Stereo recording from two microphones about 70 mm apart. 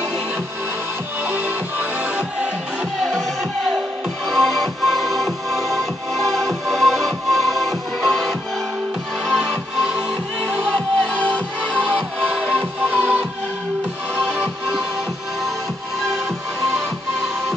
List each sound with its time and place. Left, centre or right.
1.2 s music: right
4.3 s music: centre
11.7 s music: right